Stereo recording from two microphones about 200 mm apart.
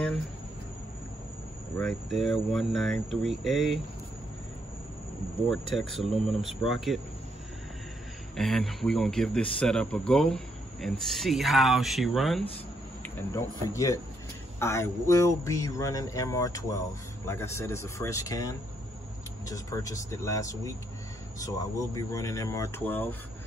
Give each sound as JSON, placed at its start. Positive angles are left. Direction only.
{"t": 1.8, "sound": "speech", "side_deg": 0}
{"t": 5.5, "sound": "speech", "side_deg": 0}
{"t": 8.4, "sound": "speech", "side_deg": 0}
{"t": 13.0, "sound": "speech", "side_deg": 15}